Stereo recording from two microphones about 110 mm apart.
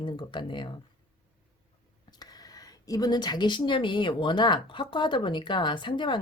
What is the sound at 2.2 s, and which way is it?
A woman's voice, 35° left (ahead or behind).